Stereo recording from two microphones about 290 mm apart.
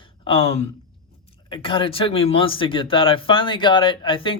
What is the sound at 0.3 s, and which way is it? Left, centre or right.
Speech, centre.